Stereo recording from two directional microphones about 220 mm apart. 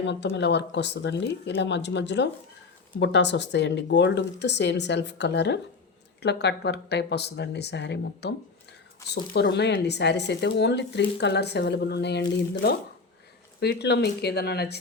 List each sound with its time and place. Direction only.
0.0 s speech: 55° left (ahead or behind)
9.3 s speech: 50° left (ahead or behind)
13.6 s speech: 50° left (ahead or behind)